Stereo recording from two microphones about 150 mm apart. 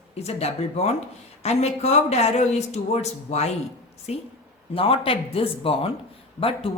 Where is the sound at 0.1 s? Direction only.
45° left (ahead or behind).